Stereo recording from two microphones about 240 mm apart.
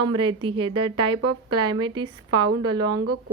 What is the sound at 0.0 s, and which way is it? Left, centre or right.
A woman's voice, right.